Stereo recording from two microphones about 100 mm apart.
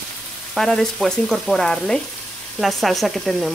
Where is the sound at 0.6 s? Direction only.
5° left (ahead or behind).